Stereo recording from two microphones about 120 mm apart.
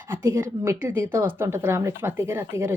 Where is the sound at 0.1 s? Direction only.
20° right (ahead or behind).